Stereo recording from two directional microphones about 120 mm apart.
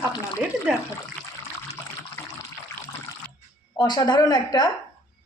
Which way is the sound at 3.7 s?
35° left (ahead or behind).